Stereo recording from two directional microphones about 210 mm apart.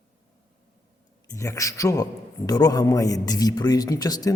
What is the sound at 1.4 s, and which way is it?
A man's voice, 15° left (ahead or behind).